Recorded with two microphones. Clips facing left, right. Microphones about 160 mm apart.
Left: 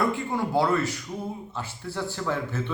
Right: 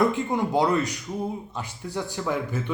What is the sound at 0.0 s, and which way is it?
A man's voice, 20° right (ahead or behind).